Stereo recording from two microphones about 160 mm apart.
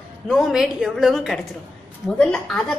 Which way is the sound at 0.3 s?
Centre (ahead or behind).